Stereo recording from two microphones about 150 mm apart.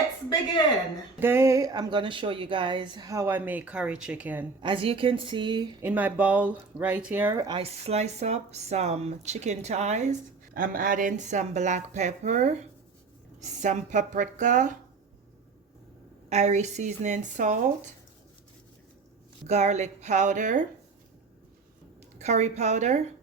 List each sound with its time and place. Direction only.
1.2 s speech: 15° right (ahead or behind)
4.6 s a woman's voice: 35° right (ahead or behind)
5.8 s speech: 10° right (ahead or behind)
7.4 s speech: 35° right (ahead or behind)
10.5 s speech: 70° right (ahead or behind)
16.3 s speech: 50° right (ahead or behind)
19.5 s speech: 50° right (ahead or behind)
22.2 s speech: 50° right (ahead or behind)